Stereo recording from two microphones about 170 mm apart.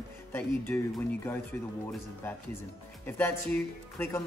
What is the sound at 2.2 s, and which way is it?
Speech, 10° left (ahead or behind).